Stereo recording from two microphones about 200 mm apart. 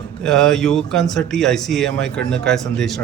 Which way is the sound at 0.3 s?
Centre (ahead or behind).